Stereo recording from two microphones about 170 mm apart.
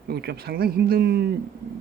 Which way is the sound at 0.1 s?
70° right (ahead or behind).